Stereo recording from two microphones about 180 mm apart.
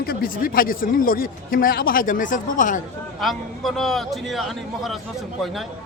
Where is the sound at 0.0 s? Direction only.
55° left (ahead or behind).